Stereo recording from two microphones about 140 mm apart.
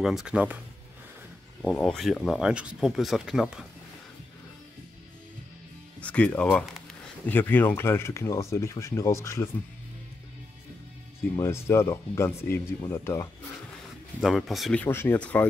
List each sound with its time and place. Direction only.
0.0 s speech: 5° right (ahead or behind)
2.1 s speech: centre (ahead or behind)
5.9 s speech: 10° left (ahead or behind)
11.3 s speech: 20° left (ahead or behind)
14.2 s speech: centre (ahead or behind)
14.8 s speech: 15° left (ahead or behind)